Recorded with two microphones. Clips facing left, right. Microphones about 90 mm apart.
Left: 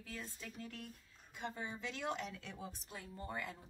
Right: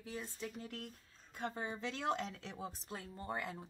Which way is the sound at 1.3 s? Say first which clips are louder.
Right 3 dB; 40° right (ahead or behind).